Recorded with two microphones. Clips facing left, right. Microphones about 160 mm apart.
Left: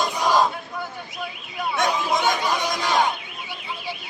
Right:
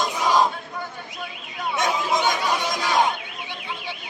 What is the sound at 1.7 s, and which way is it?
Speech, centre (ahead or behind).